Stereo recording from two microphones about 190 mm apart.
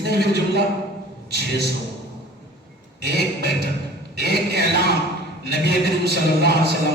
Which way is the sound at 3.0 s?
60° right (ahead or behind).